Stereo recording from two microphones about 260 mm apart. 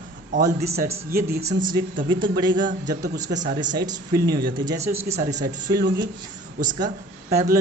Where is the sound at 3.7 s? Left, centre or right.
Centre.